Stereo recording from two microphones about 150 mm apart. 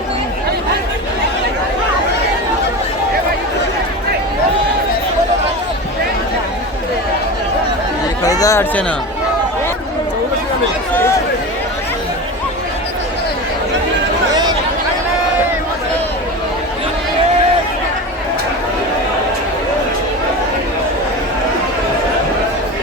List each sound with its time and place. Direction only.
8.2 s chatter: 25° left (ahead or behind)